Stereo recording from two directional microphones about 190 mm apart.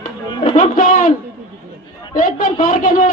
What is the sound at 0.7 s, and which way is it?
Speech, 45° left (ahead or behind).